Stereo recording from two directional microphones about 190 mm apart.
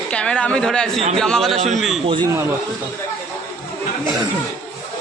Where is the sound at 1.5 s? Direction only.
35° right (ahead or behind).